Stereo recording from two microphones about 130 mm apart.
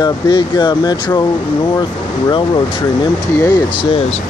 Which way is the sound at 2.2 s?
35° left (ahead or behind).